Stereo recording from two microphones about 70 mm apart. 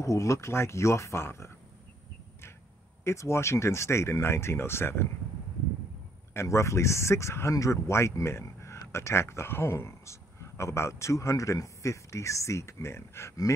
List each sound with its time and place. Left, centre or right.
0.0 s speech: left
3.0 s speech: left
6.3 s speech: left